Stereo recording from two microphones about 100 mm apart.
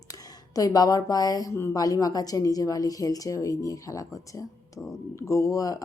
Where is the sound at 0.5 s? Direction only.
40° left (ahead or behind).